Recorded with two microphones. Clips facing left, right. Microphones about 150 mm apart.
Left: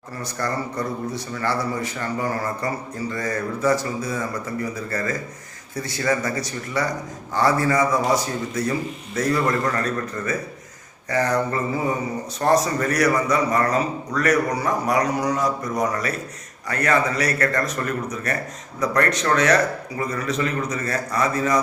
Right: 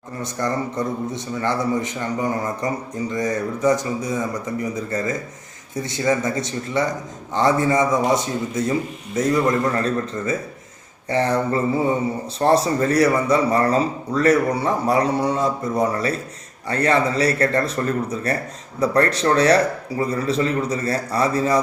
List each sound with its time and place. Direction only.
0.2 s a man's voice: 20° right (ahead or behind)